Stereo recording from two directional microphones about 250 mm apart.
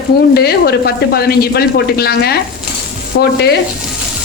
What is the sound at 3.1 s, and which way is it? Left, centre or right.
Sizzle, left.